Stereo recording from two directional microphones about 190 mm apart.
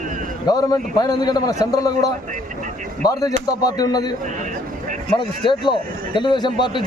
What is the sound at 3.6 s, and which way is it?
Speech, 20° left (ahead or behind).